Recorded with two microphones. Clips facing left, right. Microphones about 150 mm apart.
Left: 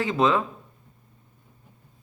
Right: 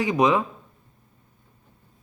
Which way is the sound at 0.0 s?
15° right (ahead or behind).